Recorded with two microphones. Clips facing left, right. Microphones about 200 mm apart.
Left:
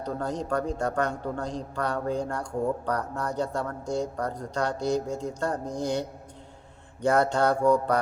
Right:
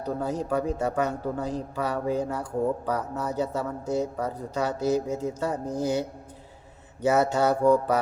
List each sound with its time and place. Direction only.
0.0 s speech: 5° right (ahead or behind)